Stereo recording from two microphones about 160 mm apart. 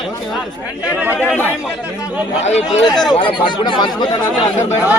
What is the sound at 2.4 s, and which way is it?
Speech, 45° left (ahead or behind).